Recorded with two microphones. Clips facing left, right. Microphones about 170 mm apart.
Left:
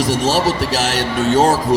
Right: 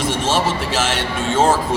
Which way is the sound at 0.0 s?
40° left (ahead or behind).